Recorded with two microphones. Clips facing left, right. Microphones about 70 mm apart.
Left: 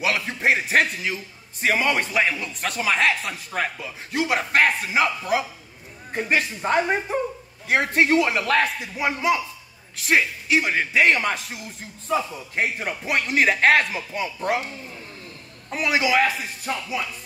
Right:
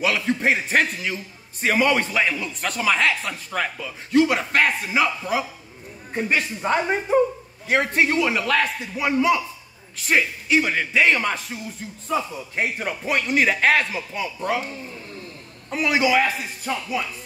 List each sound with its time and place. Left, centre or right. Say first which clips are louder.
0.0 s a man's voice: right 2 dB; centre
6.1 s a man's voice: even; centre
8.5 s speech: left 1 dB; left
10.0 s speech: even; centre
13.9 s speech: even; centre
15.7 s a man's voice: right 1 dB; centre